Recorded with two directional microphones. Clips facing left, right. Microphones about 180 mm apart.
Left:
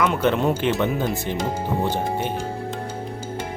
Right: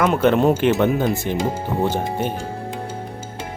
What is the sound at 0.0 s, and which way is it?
Speech, 50° right (ahead or behind).